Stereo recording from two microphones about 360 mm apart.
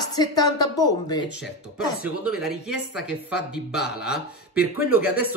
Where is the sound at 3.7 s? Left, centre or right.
Centre.